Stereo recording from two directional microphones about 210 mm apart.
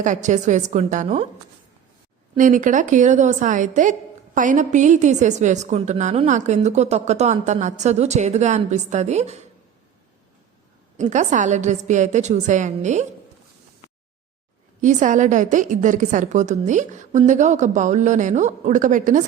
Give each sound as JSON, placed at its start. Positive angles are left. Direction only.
{"t": 0.0, "sound": "a woman's voice", "side_deg": -35}
{"t": 2.4, "sound": "a woman's voice", "side_deg": -35}
{"t": 10.9, "sound": "a woman's voice", "side_deg": -35}
{"t": 14.8, "sound": "a woman's voice", "side_deg": -35}